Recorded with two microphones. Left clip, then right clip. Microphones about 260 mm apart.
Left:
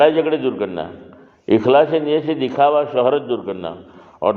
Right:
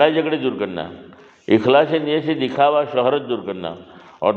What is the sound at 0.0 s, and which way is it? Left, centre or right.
A man's voice, right.